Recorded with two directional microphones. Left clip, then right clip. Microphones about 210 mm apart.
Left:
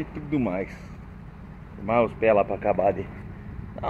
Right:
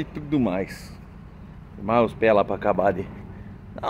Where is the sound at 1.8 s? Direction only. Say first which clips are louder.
Right 2 dB; 20° right (ahead or behind).